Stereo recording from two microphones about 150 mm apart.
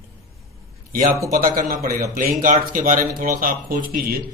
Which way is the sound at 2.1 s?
65° right (ahead or behind).